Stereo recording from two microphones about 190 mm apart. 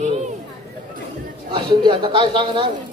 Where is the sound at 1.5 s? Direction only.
25° right (ahead or behind).